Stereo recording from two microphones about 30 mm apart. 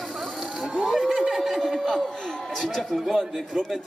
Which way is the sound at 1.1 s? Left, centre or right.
Centre.